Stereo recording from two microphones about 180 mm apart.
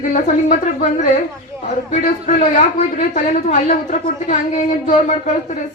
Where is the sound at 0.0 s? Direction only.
45° left (ahead or behind).